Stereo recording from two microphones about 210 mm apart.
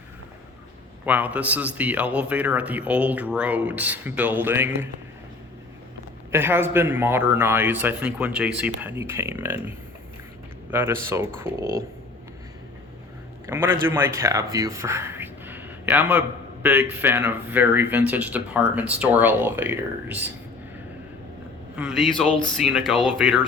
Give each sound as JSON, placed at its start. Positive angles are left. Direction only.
{"t": 1.0, "sound": "a man's voice", "side_deg": -5}
{"t": 6.3, "sound": "a man's voice", "side_deg": -10}
{"t": 13.5, "sound": "a man's voice", "side_deg": -10}
{"t": 21.8, "sound": "speech", "side_deg": 0}